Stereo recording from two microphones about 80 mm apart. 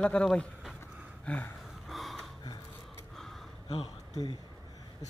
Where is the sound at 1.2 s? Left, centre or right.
Centre.